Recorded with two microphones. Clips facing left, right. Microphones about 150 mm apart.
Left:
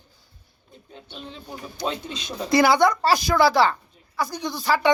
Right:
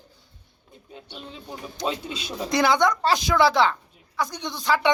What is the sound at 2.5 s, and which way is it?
A woman's voice, 5° left (ahead or behind).